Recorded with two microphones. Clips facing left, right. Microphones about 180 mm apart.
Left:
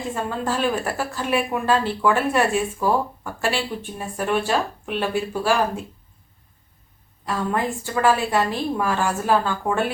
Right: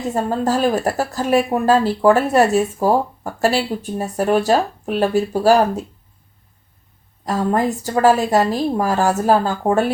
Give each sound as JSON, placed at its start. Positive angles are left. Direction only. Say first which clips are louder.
{"t": 0.0, "sound": "a woman's voice", "louder": "right 6 dB", "side_deg": -40}
{"t": 7.3, "sound": "a woman's voice", "louder": "right 6 dB", "side_deg": -40}